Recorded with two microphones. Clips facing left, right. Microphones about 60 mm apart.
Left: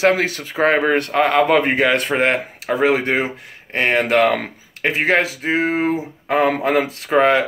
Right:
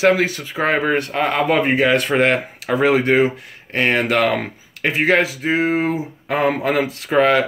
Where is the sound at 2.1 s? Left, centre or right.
Centre.